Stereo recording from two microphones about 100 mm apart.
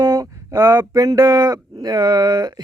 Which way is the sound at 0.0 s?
40° right (ahead or behind).